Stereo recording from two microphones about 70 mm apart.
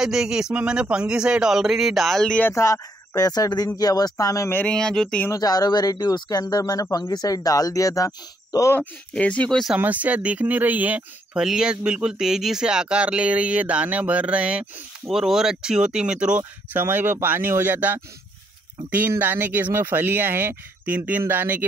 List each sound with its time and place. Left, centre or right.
0.0 s speech: centre
2.5 s speech: left
3.2 s speech: left
4.6 s speech: centre
5.3 s speech: left
9.1 s speech: centre
9.8 s speech: right
11.3 s speech: centre
15.0 s speech: centre
16.7 s speech: right